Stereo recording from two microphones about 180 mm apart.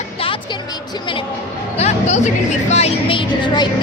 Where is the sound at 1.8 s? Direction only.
40° left (ahead or behind).